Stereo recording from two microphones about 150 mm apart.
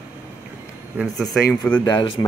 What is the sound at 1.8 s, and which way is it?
Speech, 30° left (ahead or behind).